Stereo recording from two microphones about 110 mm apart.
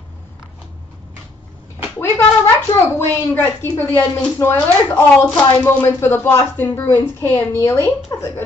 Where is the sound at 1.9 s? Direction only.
25° left (ahead or behind).